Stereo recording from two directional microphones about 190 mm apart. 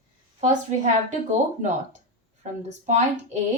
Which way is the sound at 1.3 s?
40° right (ahead or behind).